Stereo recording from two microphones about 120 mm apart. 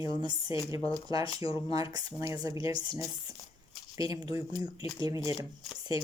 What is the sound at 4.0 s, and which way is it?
Speech, 30° right (ahead or behind).